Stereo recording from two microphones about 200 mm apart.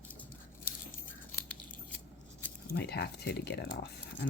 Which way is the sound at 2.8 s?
55° left (ahead or behind).